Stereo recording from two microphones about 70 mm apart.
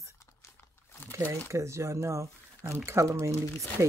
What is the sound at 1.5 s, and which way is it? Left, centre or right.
Speech, right.